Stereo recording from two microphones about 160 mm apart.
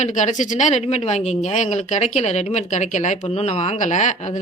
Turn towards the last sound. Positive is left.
turn(degrees=50)  # may be behind; listen again after turning